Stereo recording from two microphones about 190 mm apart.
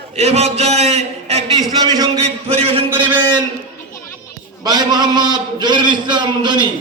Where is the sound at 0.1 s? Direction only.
35° right (ahead or behind).